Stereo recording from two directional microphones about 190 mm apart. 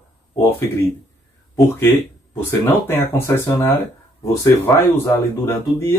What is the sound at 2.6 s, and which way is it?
A man's voice, 10° left (ahead or behind).